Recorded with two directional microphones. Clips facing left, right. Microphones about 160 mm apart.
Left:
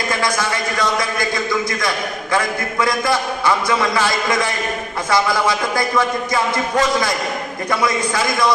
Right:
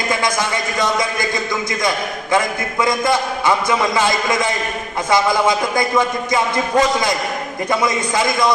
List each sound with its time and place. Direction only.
0.1 s a man's voice: 20° right (ahead or behind)
2.3 s a man's voice: 20° right (ahead or behind)